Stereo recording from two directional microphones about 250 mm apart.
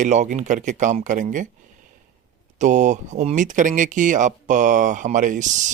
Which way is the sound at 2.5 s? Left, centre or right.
Right.